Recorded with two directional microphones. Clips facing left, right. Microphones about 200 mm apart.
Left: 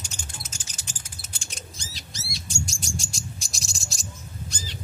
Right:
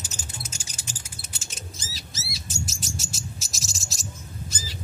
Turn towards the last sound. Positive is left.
turn(degrees=-5)  # may be behind; listen again after turning